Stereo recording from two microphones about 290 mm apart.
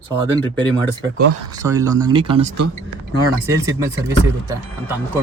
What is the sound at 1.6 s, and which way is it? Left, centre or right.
Speech, centre.